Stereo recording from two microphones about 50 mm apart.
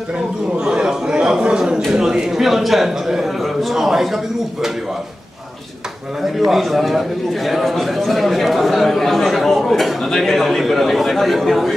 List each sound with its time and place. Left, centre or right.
0.6 s a sound: centre
1.9 s a man's voice: centre
6.2 s a man's voice: centre